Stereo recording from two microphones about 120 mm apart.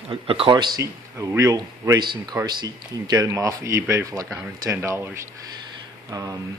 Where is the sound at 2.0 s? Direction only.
40° right (ahead or behind).